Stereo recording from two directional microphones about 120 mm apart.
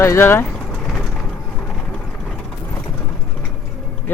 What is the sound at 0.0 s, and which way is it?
Speech, 20° left (ahead or behind).